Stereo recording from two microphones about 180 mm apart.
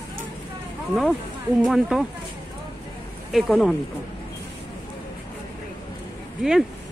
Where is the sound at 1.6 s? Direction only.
5° right (ahead or behind).